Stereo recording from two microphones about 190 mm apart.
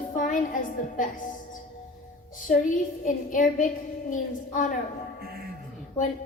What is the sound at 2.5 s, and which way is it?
A woman's voice, 45° left (ahead or behind).